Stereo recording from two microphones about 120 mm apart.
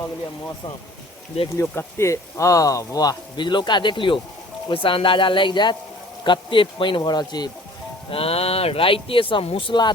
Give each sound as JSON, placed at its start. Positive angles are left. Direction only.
{"t": 1.5, "sound": "speech", "side_deg": 20}
{"t": 8.1, "sound": "speech", "side_deg": 55}